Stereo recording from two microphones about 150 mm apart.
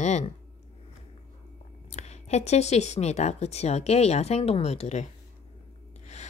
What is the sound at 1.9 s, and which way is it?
A woman's voice, 50° left (ahead or behind).